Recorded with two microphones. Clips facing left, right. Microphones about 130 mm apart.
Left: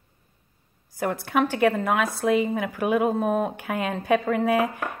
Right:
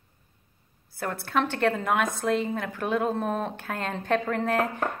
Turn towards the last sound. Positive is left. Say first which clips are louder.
# left 3 dB
turn(degrees=10)  # may be behind; listen again after turning